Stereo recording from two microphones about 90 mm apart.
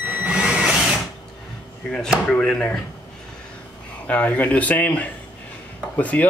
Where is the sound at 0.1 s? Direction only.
10° right (ahead or behind).